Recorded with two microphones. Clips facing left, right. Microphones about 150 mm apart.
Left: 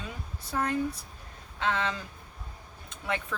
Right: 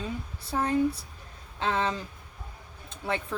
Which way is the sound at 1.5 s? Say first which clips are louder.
Right 2 dB; 30° right (ahead or behind).